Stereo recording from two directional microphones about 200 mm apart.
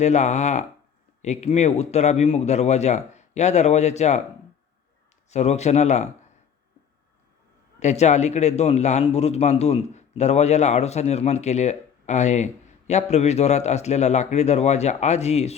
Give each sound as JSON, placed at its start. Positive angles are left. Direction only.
{"t": 0.0, "sound": "a man's voice", "side_deg": 35}
{"t": 5.3, "sound": "a man's voice", "side_deg": 35}
{"t": 7.8, "sound": "a man's voice", "side_deg": 35}